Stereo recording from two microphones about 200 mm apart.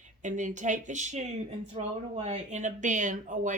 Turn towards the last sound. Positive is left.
turn(degrees=-40)  # may be behind; listen again after turning